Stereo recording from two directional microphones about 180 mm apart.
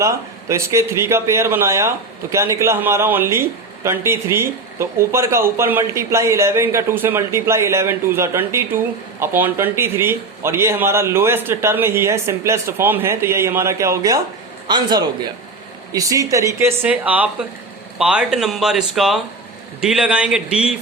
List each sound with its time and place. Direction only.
0.0 s a man's voice: 15° right (ahead or behind)